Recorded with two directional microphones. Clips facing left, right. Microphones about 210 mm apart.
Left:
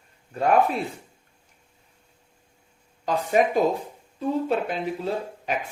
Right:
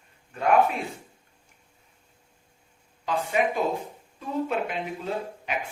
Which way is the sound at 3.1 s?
40° left (ahead or behind).